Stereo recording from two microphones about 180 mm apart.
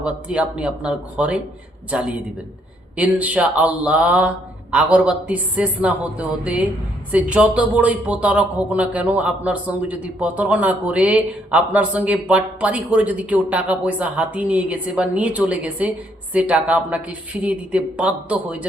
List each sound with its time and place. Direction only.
0.0 s speech: 5° right (ahead or behind)